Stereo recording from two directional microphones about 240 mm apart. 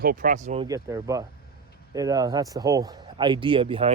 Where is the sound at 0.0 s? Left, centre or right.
Right.